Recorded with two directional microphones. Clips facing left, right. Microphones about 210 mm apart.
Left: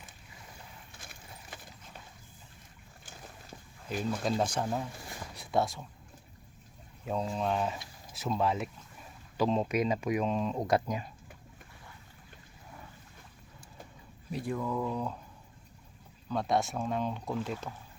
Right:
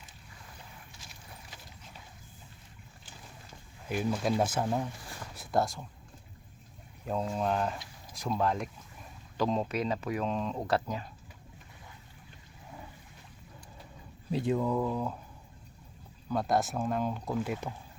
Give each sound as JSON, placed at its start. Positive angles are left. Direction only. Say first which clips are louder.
{"t": 0.9, "sound": "clip-clop", "louder": "left 1 dB", "side_deg": 55}
{"t": 3.8, "sound": "speech", "louder": "right 2 dB", "side_deg": -10}
{"t": 7.0, "sound": "speech", "louder": "right 1 dB", "side_deg": 0}
{"t": 14.3, "sound": "speech", "louder": "right 5 dB", "side_deg": -25}
{"t": 14.8, "sound": "speech", "louder": "right 2 dB", "side_deg": -5}
{"t": 16.3, "sound": "speech", "louder": "right 1 dB", "side_deg": 0}